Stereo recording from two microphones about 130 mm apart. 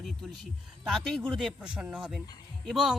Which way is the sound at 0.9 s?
Centre (ahead or behind).